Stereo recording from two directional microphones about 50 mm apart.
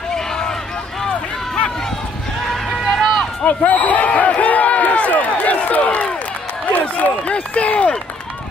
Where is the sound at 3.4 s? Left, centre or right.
Left.